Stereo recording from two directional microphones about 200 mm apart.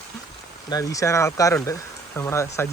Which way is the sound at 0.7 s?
15° left (ahead or behind).